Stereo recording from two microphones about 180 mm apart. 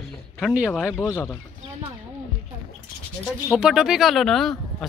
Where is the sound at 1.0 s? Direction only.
15° left (ahead or behind).